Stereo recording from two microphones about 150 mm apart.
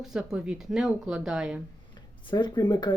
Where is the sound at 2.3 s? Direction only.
30° left (ahead or behind).